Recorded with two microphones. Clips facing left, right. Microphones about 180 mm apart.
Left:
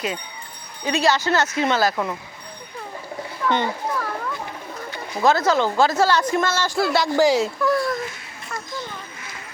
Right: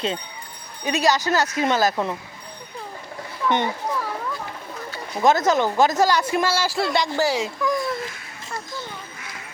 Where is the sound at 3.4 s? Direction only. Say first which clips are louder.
Even; 15° right (ahead or behind).